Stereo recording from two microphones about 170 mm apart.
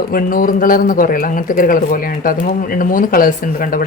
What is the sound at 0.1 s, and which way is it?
Speech, 55° left (ahead or behind).